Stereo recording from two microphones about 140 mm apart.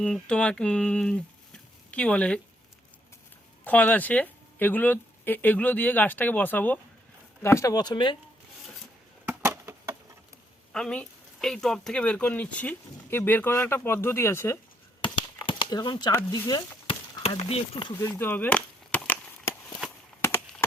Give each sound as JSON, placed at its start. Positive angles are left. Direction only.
{"t": 0.0, "sound": "speech", "side_deg": 5}
{"t": 3.6, "sound": "speech", "side_deg": 10}
{"t": 9.2, "sound": "a sound", "side_deg": -20}
{"t": 10.7, "sound": "speech", "side_deg": 5}
{"t": 15.4, "sound": "speech", "side_deg": 30}
{"t": 17.9, "sound": "a sound", "side_deg": 20}